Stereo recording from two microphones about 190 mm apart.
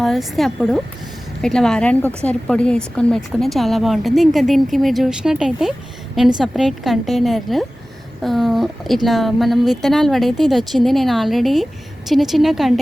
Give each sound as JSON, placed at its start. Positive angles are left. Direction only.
{"t": 0.0, "sound": "a woman's voice", "side_deg": 0}